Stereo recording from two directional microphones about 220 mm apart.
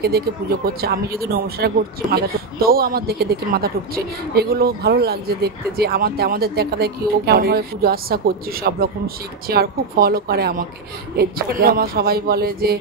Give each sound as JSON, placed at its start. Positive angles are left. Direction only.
{"t": 0.0, "sound": "speech", "side_deg": -45}